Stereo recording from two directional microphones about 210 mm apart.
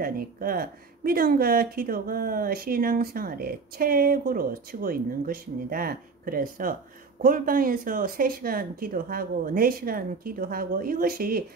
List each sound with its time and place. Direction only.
0.0 s speech: 45° right (ahead or behind)